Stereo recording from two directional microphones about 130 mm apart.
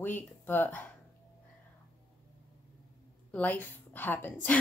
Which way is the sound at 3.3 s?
10° left (ahead or behind).